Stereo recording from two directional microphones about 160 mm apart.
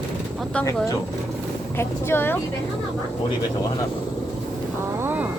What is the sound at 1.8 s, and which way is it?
Speech, 15° left (ahead or behind).